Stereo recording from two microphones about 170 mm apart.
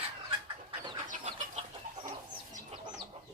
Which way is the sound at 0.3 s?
30° right (ahead or behind).